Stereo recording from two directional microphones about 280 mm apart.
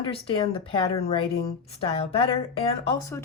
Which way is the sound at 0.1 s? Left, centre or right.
Centre.